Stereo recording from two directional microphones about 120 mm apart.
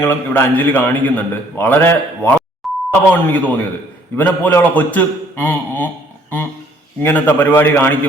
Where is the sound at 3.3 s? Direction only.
15° left (ahead or behind).